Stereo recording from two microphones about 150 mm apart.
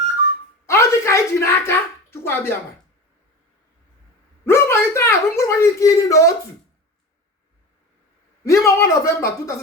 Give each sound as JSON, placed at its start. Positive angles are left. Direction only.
{"t": 0.7, "sound": "dog", "side_deg": 20}
{"t": 4.4, "sound": "a sound", "side_deg": 15}
{"t": 8.4, "sound": "speech", "side_deg": 20}